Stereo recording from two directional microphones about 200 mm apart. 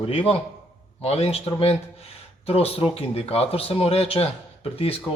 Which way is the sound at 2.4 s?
30° left (ahead or behind).